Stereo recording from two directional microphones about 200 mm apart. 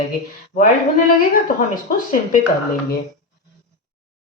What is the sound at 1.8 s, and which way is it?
Speech, 40° left (ahead or behind).